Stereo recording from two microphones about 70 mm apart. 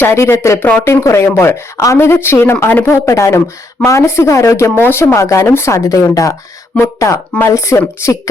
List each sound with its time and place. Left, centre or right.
0.0 s a woman's voice: left
0.6 s speech: left
0.9 s a woman's voice: left
3.1 s a woman's voice: left
4.8 s a woman's voice: left
5.1 s speech: left